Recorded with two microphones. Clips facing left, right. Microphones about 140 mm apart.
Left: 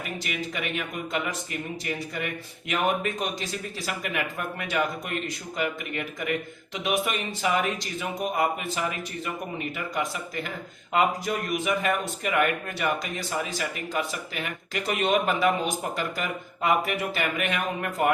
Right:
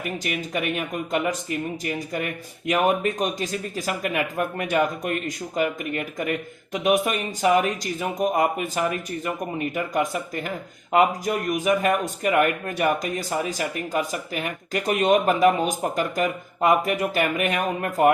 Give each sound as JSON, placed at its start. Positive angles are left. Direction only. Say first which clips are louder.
{"t": 0.3, "sound": "speech", "louder": "right 5 dB", "side_deg": -45}
{"t": 2.6, "sound": "speech", "louder": "right 5 dB", "side_deg": -40}
{"t": 11.6, "sound": "speech", "louder": "right 7 dB", "side_deg": -45}